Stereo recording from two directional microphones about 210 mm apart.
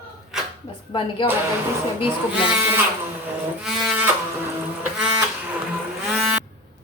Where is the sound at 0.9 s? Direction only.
25° left (ahead or behind).